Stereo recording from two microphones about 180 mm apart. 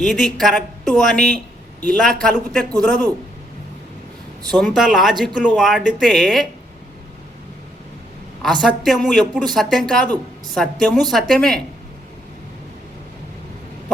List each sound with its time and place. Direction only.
0.0 s speech: centre (ahead or behind)
4.4 s speech: 5° left (ahead or behind)
8.6 s speech: centre (ahead or behind)